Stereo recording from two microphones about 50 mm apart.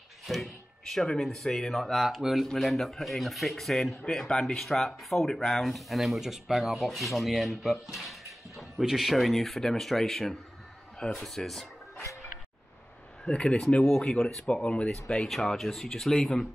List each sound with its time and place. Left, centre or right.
0.3 s a sound: centre
1.0 s speech: centre
13.3 s speech: centre
13.8 s speech: centre
14.5 s speech: left
15.2 s speech: centre